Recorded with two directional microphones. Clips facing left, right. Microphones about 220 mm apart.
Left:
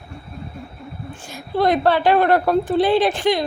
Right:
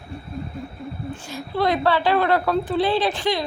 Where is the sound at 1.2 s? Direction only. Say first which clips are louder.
Left 4 dB; 50° left (ahead or behind).